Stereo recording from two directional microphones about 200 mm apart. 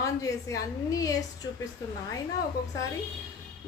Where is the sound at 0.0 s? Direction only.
15° left (ahead or behind).